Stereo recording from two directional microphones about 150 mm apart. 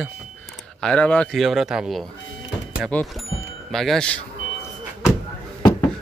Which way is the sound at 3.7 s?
Centre (ahead or behind).